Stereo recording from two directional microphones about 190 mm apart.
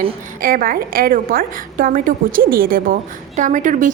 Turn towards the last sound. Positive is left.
turn(degrees=-45)  # may be behind; listen again after turning